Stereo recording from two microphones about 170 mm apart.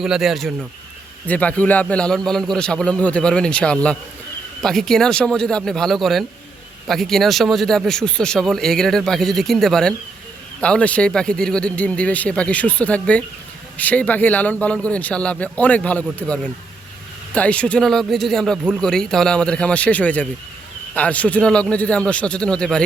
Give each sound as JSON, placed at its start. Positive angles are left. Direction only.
{"t": 0.0, "sound": "a man's voice", "side_deg": -5}